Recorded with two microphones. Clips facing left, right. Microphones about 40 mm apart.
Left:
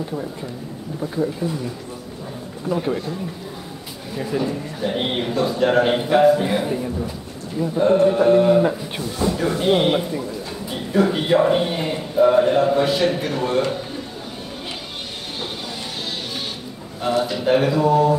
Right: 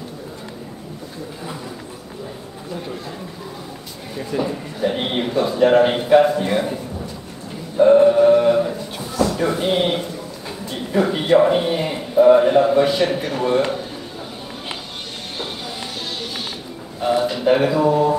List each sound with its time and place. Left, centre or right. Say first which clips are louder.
2.7 s speech: left 8 dB; left
4.4 s a man's voice: right 4 dB; centre
9.1 s speech: right 3 dB; centre
9.4 s a man's voice: left 4 dB; centre
17.2 s a man's voice: right 1 dB; centre